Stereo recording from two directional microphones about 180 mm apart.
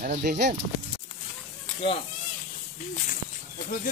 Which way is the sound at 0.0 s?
50° right (ahead or behind).